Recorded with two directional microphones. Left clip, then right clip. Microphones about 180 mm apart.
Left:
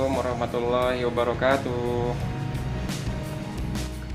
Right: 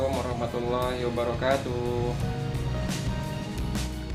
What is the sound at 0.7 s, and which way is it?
Speech, 25° left (ahead or behind).